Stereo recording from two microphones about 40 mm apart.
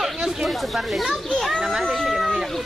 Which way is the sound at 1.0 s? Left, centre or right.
Centre.